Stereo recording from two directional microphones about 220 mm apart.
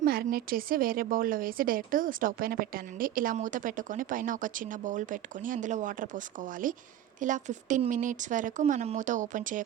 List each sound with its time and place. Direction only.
0.0 s a woman's voice: 40° right (ahead or behind)